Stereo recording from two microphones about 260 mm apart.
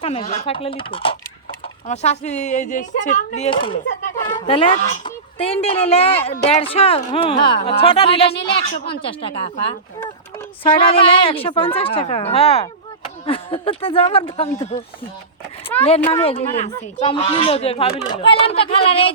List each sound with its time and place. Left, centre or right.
0.0 s speech: left
10.6 s speech: left
16.0 s speech: centre
16.2 s speech: left